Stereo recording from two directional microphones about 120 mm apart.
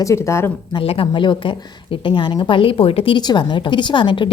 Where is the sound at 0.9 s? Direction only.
45° left (ahead or behind).